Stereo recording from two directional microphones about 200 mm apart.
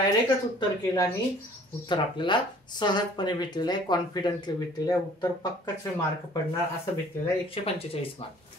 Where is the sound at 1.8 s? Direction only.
25° left (ahead or behind).